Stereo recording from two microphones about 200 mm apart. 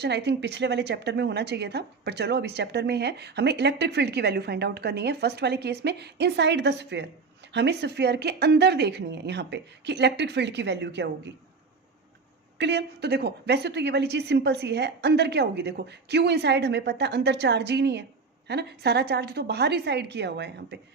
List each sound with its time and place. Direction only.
0.0 s speech: 55° right (ahead or behind)
12.5 s speech: 60° right (ahead or behind)